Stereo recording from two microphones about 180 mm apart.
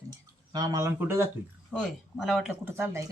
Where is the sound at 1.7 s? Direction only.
Centre (ahead or behind).